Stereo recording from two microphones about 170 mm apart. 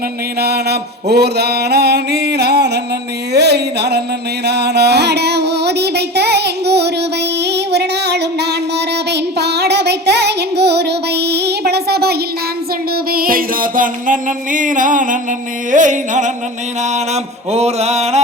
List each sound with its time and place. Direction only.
0.3 s mantra: 70° right (ahead or behind)
3.3 s a sound: 75° right (ahead or behind)
4.4 s music: 75° right (ahead or behind)
7.4 s female singing: 80° right
9.0 s music: 80° right
13.1 s music: 60° right (ahead or behind)
17.5 s music: 40° right (ahead or behind)